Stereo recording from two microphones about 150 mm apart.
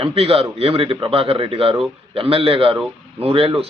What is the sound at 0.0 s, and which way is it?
A man's voice, 40° right (ahead or behind).